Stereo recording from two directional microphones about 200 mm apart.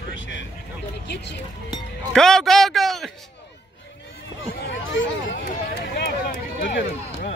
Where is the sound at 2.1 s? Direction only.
Centre (ahead or behind).